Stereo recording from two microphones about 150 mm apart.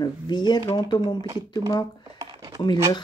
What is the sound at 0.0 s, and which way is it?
Speech, 30° left (ahead or behind).